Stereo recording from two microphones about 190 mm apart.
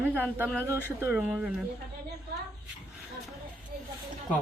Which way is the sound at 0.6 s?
15° right (ahead or behind).